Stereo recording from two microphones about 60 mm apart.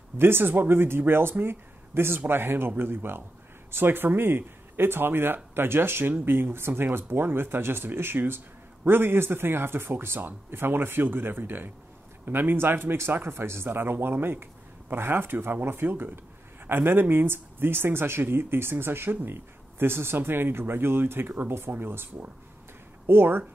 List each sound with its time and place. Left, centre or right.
0.2 s speech: right